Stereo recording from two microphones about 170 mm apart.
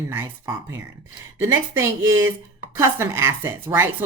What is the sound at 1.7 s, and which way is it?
Speech, 15° right (ahead or behind).